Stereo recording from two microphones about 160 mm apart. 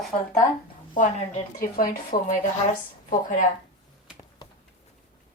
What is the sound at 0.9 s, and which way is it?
Speech, 55° left (ahead or behind).